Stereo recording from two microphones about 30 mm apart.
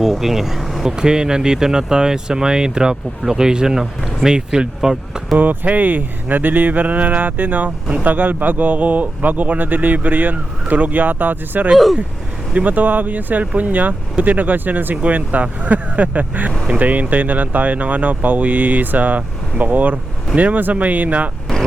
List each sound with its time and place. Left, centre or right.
0.0 s speech: centre
0.9 s speech: right
5.4 s speech: right
10.7 s speech: right
12.5 s speech: right
15.0 s speech: right